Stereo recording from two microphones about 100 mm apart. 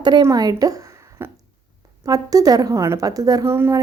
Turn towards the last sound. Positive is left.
turn(degrees=-35)  # may be behind; listen again after turning